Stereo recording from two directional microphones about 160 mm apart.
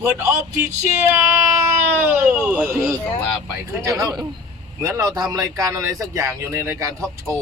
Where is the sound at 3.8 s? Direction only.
20° right (ahead or behind).